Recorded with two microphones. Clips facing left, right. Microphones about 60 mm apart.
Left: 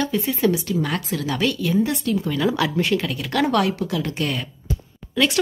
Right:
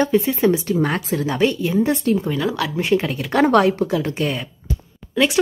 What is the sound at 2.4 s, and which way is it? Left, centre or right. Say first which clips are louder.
Speech: left 1 dB; centre.